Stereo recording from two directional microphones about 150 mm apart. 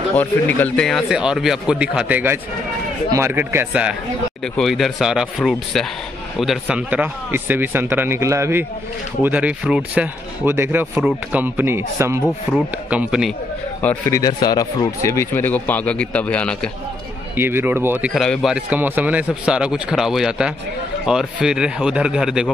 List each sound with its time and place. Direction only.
0.1 s a man's voice: 10° left (ahead or behind); by 3.9 s 10° right (ahead or behind)
4.6 s a man's voice: centre (ahead or behind); by 12.2 s 15° right (ahead or behind)
12.5 s speech: 5° right (ahead or behind)
14.1 s speech: 25° left (ahead or behind); by 16.7 s 5° left (ahead or behind)
17.4 s a man's voice: 15° right (ahead or behind)
18.1 s speech: centre (ahead or behind)